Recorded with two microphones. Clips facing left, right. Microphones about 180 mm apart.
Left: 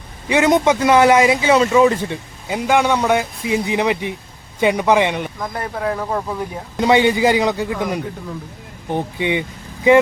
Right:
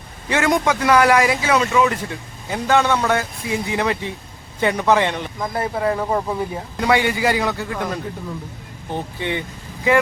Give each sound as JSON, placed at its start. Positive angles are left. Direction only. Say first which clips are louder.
{"t": 0.3, "sound": "speech", "louder": "left 4 dB", "side_deg": 20}
{"t": 2.5, "sound": "speech", "louder": "left 1 dB", "side_deg": 15}
{"t": 5.4, "sound": "speech", "louder": "right 2 dB", "side_deg": -5}
{"t": 6.7, "sound": "speech", "louder": "left 4 dB", "side_deg": 20}